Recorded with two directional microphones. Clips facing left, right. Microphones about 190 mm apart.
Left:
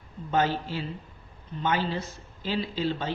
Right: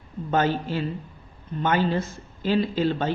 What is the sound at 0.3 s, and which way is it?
Speech, 55° right (ahead or behind).